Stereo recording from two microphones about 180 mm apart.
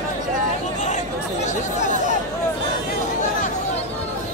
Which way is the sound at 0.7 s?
40° left (ahead or behind).